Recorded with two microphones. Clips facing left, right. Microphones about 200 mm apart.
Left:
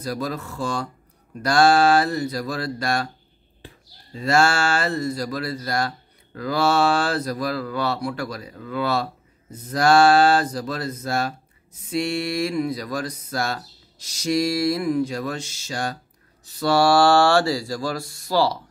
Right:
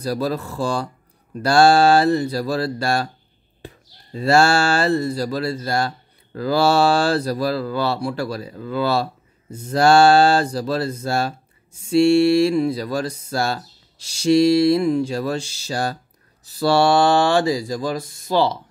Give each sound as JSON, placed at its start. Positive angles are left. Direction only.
{"t": 0.0, "sound": "speech", "side_deg": -35}